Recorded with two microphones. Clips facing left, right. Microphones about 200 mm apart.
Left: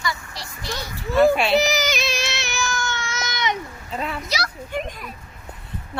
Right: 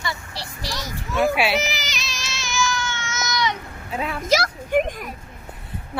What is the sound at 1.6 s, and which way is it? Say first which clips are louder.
Baby cry: left 8 dB; 45° left (ahead or behind).